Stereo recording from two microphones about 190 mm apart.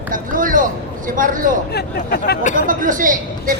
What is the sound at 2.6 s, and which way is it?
Speech, 45° right (ahead or behind).